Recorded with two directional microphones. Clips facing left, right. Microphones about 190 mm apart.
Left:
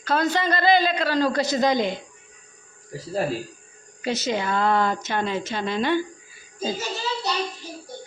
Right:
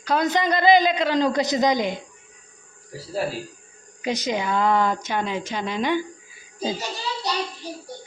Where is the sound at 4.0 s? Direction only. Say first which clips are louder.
Even; 15° right (ahead or behind).